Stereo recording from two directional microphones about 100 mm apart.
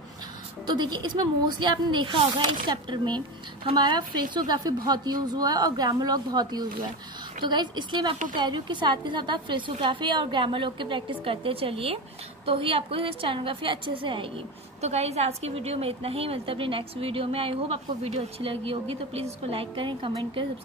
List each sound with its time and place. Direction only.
0.7 s a woman's voice: 50° right (ahead or behind); by 19.2 s 75° right (ahead or behind)
19.5 s a woman's voice: 60° right (ahead or behind)